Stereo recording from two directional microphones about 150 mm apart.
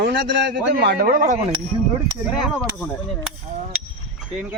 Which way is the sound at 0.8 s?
90° right.